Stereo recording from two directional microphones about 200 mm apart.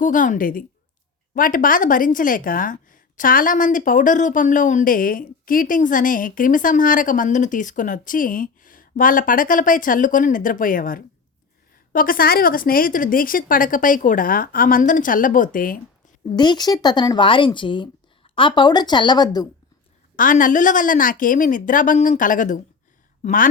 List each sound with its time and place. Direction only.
0.0 s a woman's voice: 40° left (ahead or behind)
16.3 s speech: 20° left (ahead or behind)
20.1 s a woman's voice: 40° left (ahead or behind)